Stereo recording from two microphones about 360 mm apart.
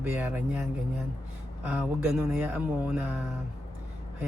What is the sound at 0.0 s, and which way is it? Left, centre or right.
Speech, centre.